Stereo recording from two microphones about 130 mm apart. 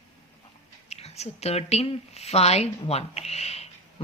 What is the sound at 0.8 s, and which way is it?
A woman's voice, 55° left (ahead or behind).